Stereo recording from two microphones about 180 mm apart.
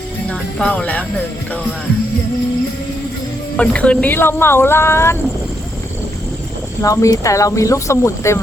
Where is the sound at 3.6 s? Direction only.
5° left (ahead or behind).